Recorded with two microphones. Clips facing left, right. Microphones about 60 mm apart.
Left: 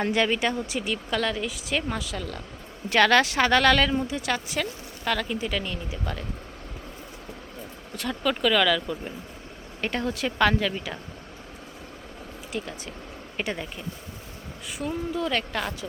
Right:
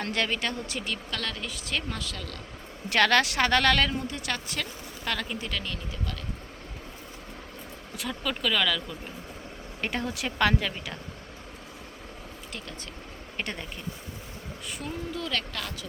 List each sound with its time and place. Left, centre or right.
0.0 s speech: centre
2.9 s a woman's voice: centre; by 6.2 s left
7.9 s a woman's voice: centre
13.3 s a woman's voice: centre
14.8 s speech: centre